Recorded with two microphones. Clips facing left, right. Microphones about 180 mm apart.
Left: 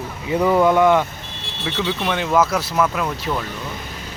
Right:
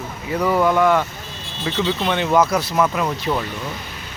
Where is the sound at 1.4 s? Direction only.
70° left (ahead or behind).